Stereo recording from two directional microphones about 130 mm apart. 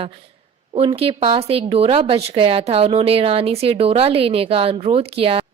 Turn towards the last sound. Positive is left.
turn(degrees=-45)  # may be behind; listen again after turning